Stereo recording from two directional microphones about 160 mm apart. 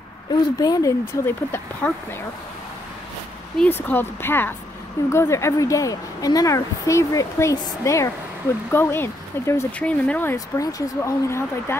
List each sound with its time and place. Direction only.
0.6 s speech: 20° left (ahead or behind)
3.5 s a woman's voice: 10° left (ahead or behind)